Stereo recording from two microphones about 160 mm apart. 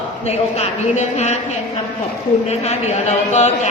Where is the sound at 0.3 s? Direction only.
45° left (ahead or behind).